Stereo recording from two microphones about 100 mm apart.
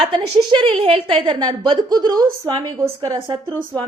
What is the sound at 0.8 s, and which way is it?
A woman's voice, 65° right (ahead or behind).